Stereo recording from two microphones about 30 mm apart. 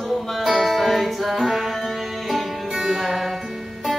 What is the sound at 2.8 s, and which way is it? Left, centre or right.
Music, right.